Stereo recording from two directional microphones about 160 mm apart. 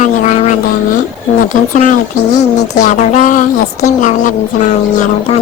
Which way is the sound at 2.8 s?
50° left (ahead or behind).